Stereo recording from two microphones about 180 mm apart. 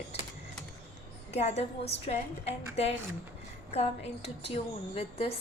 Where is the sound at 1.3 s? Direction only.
35° left (ahead or behind).